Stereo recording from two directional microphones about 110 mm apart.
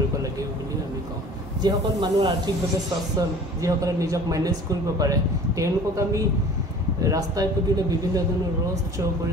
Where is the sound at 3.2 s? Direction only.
30° right (ahead or behind).